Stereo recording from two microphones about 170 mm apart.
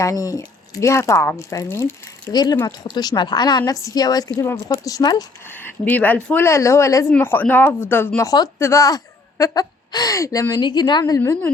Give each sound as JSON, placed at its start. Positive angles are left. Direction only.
{"t": 0.0, "sound": "a woman's voice", "side_deg": 20}
{"t": 5.5, "sound": "a woman's voice", "side_deg": 10}